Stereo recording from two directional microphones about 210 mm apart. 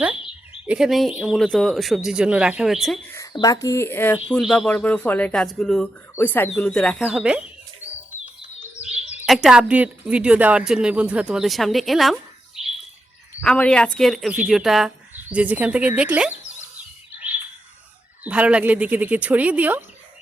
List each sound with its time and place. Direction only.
0.0 s speech: 5° right (ahead or behind)
3.2 s speech: 15° left (ahead or behind)
4.2 s speech: 5° right (ahead or behind)
8.8 s speech: 5° right (ahead or behind)
18.2 s speech: 5° right (ahead or behind)